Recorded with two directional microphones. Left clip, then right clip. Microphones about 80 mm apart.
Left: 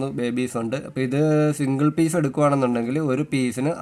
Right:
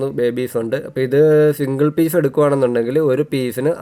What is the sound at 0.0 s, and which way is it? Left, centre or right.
Speech, right.